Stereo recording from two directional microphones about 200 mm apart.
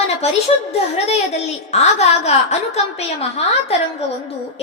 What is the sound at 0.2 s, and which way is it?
A woman's voice, 35° left (ahead or behind).